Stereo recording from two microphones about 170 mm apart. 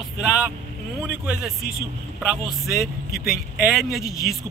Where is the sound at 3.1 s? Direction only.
60° left (ahead or behind).